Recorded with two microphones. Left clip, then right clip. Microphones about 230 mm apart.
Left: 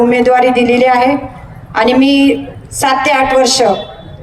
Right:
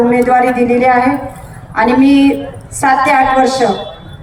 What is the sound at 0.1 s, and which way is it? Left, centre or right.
A woman's voice, left.